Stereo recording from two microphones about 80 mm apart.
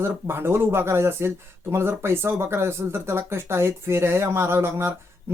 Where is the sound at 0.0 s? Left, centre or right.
Right.